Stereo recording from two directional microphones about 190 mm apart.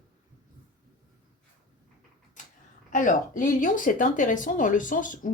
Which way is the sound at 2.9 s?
40° left (ahead or behind).